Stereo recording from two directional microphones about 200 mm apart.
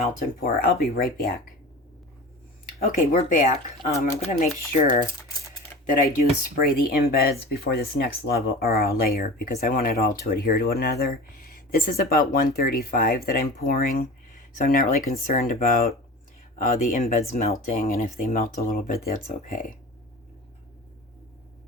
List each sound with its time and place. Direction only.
0.3 s speech: 50° left (ahead or behind)
2.8 s speech: 40° left (ahead or behind)
6.6 s speech: 50° left (ahead or behind)